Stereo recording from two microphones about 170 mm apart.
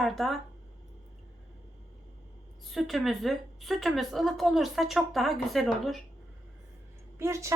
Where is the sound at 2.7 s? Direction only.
Centre (ahead or behind).